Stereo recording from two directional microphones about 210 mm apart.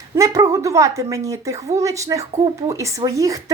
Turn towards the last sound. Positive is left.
turn(degrees=-15)  # may be behind; listen again after turning